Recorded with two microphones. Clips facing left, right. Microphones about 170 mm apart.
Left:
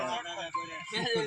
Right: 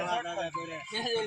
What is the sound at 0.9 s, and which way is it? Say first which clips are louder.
Speech: left 1 dB; 5° right (ahead or behind).